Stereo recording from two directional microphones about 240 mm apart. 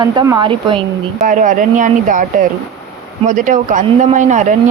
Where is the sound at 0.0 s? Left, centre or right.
Centre.